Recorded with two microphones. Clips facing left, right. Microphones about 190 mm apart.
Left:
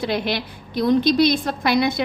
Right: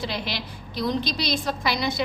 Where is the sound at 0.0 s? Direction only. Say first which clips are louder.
Left 7 dB; 55° left (ahead or behind).